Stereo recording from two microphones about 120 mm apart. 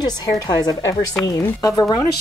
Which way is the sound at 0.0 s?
35° left (ahead or behind).